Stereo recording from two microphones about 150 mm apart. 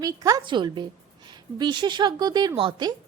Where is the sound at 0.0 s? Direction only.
25° right (ahead or behind).